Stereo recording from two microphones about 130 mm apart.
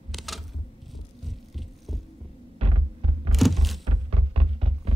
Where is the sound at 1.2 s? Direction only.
Centre (ahead or behind).